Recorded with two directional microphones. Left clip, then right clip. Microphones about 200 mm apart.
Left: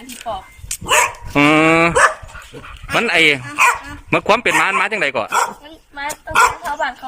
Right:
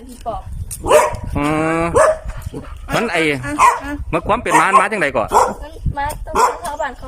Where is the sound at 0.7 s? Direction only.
40° right (ahead or behind).